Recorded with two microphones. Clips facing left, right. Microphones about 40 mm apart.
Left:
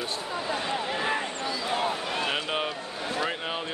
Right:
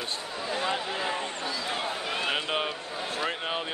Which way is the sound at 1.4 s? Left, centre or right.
Centre.